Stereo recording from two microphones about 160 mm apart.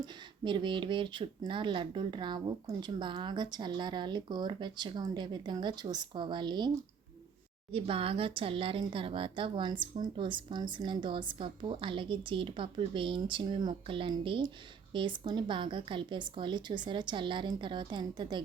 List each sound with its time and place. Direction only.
0.0 s speech: 30° right (ahead or behind)
7.7 s speech: 35° right (ahead or behind)